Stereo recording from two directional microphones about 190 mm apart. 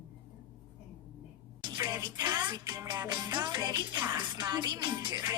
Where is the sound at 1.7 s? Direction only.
20° right (ahead or behind).